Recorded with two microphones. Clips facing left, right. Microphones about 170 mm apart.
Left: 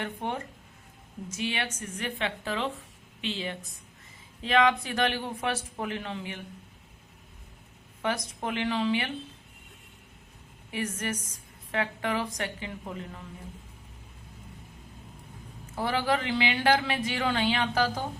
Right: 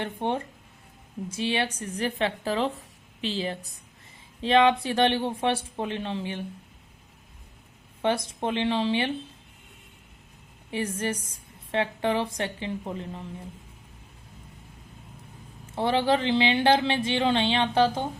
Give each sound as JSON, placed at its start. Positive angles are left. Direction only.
{"t": 0.0, "sound": "a woman's voice", "side_deg": -30}
{"t": 8.0, "sound": "speech", "side_deg": -30}
{"t": 10.7, "sound": "speech", "side_deg": -30}
{"t": 15.7, "sound": "speech", "side_deg": -25}